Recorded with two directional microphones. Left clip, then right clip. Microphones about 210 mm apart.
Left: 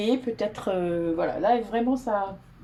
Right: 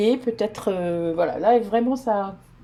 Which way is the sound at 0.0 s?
45° right (ahead or behind).